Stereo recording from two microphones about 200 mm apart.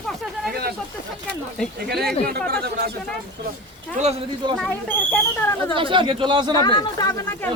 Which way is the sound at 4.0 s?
30° right (ahead or behind).